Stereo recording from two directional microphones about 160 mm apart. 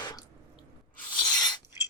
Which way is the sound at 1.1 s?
25° left (ahead or behind).